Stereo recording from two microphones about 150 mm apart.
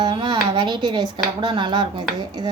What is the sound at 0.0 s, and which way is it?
Speech, 30° right (ahead or behind).